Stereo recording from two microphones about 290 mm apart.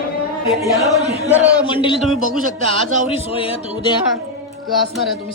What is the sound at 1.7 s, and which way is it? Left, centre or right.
A woman's voice, centre.